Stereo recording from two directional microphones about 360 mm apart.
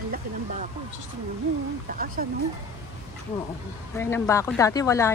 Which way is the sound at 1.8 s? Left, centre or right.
Right.